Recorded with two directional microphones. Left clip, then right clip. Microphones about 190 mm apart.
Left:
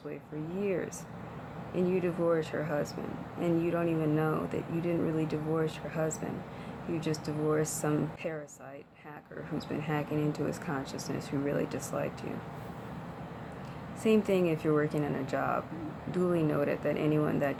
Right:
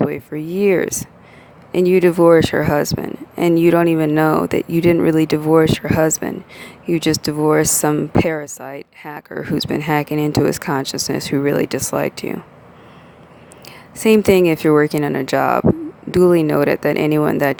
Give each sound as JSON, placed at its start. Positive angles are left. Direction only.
{"t": 0.6, "sound": "speech", "side_deg": -60}
{"t": 14.0, "sound": "speech", "side_deg": -55}